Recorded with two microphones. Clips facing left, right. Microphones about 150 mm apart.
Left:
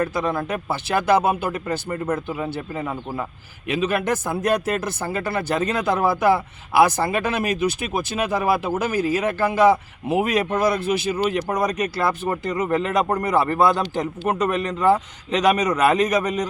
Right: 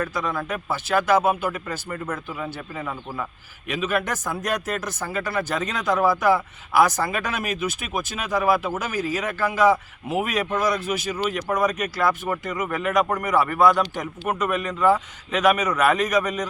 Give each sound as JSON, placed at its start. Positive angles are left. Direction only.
{"t": 0.0, "sound": "speech", "side_deg": 30}
{"t": 8.9, "sound": "speech", "side_deg": 55}
{"t": 9.2, "sound": "speech", "side_deg": 30}